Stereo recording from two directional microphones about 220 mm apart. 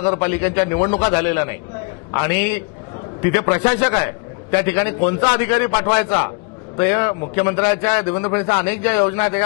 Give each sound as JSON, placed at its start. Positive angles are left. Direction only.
{"t": 0.0, "sound": "a man's voice", "side_deg": 25}